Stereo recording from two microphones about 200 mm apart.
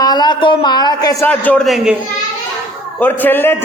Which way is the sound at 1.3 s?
5° left (ahead or behind).